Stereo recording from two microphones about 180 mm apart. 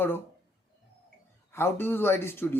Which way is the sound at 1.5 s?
10° left (ahead or behind).